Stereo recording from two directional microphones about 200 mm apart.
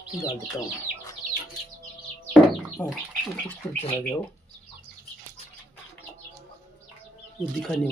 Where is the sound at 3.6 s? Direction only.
15° left (ahead or behind).